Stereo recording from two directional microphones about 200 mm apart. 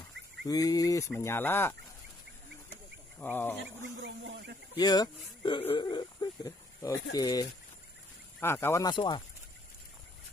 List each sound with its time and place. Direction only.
0.5 s speech: 20° left (ahead or behind)
3.2 s speech: 10° left (ahead or behind)
4.0 s speech: 60° right (ahead or behind)
4.7 s speech: 20° left (ahead or behind)